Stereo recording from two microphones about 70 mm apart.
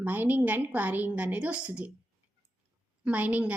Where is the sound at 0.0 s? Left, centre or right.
Right.